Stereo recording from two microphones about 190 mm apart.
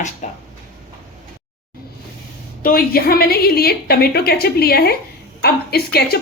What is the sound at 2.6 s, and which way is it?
A woman's voice, 50° left (ahead or behind).